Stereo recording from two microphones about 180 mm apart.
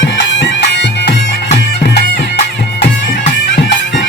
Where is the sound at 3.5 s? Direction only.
70° left (ahead or behind).